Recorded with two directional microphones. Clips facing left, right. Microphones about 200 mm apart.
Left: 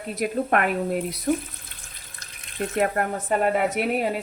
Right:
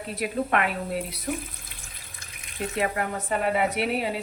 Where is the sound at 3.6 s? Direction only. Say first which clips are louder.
Left 2 dB; 50° left (ahead or behind).